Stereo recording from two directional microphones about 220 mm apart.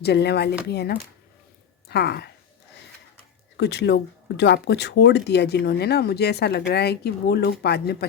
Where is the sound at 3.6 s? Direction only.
50° left (ahead or behind).